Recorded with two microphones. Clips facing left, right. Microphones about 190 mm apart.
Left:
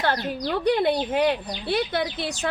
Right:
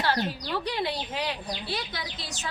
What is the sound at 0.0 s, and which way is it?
A woman's voice, 55° left (ahead or behind).